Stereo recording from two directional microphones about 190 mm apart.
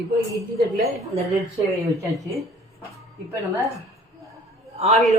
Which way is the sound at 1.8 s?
15° right (ahead or behind).